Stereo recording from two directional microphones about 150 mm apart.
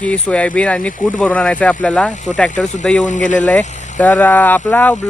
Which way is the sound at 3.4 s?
10° left (ahead or behind).